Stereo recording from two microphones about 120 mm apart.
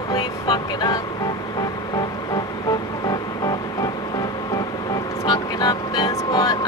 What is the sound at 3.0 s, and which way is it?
Music, 35° left (ahead or behind).